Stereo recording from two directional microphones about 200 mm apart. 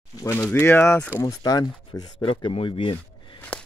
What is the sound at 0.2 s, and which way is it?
Speech, 15° left (ahead or behind).